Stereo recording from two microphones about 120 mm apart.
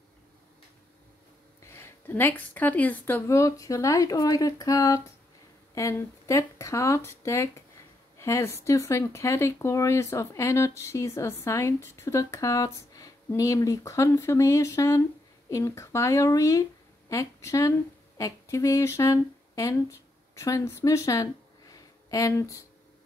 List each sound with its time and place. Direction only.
1.6 s speech: 20° left (ahead or behind)